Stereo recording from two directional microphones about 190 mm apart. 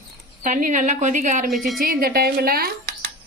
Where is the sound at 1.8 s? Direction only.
50° right (ahead or behind).